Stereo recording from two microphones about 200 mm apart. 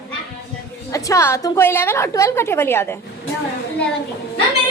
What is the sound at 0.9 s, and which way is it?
A woman's voice, 15° left (ahead or behind).